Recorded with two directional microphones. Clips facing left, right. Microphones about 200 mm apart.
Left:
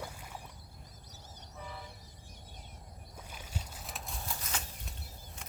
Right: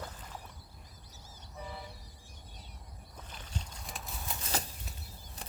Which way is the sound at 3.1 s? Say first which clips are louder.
Even; 10° left (ahead or behind).